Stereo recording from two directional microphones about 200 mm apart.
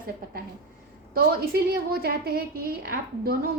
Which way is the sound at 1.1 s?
50° right (ahead or behind).